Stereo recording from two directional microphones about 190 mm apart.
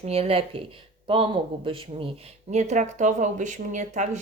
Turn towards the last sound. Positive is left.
turn(degrees=-40)  # may be behind; listen again after turning